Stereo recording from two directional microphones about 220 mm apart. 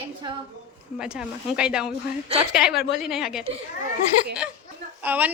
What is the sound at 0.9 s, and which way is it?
A woman's voice, 5° right (ahead or behind).